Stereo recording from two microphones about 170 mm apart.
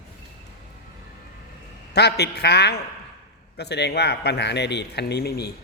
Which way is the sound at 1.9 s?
75° left (ahead or behind).